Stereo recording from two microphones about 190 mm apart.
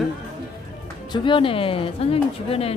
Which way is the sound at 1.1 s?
25° left (ahead or behind).